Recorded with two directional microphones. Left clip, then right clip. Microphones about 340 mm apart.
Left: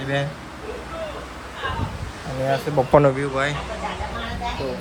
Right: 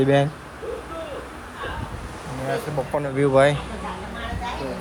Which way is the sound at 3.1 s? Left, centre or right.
Centre.